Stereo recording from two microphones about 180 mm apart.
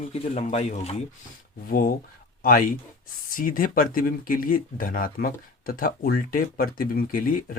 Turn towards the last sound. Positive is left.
turn(degrees=50)  # may be behind; listen again after turning